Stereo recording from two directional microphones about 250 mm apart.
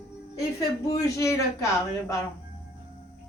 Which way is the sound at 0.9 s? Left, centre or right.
Centre.